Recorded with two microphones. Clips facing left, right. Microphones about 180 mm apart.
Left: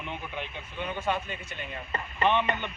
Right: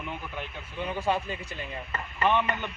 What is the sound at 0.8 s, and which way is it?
Speech, 35° right (ahead or behind).